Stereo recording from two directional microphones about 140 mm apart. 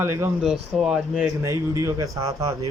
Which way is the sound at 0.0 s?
20° right (ahead or behind).